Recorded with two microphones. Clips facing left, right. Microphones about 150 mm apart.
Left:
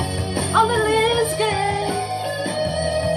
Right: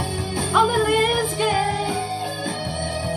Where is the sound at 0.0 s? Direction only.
65° left (ahead or behind).